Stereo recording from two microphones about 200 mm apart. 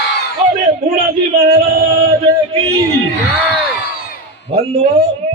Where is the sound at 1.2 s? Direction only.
35° right (ahead or behind).